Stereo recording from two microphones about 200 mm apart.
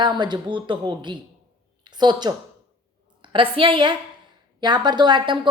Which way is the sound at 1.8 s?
20° right (ahead or behind).